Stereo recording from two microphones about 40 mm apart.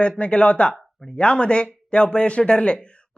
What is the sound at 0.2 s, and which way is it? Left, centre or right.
A woman's voice, left.